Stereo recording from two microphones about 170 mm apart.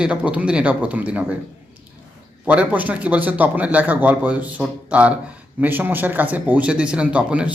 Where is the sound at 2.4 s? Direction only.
10° right (ahead or behind).